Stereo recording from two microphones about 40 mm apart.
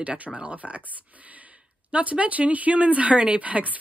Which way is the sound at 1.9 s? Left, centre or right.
Right.